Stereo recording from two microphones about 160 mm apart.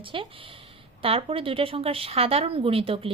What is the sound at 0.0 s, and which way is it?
Speech, 30° right (ahead or behind).